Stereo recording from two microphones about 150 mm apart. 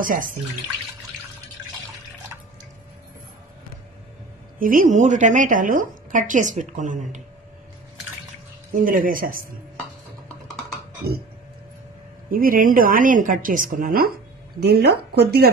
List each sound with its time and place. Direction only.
0.0 s a woman's voice: 65° right (ahead or behind)
4.6 s a woman's voice: 65° right (ahead or behind)
8.7 s speech: 70° right (ahead or behind)
11.0 s a sound: 90° right
12.3 s speech: 70° right (ahead or behind); by 15.5 s 90° right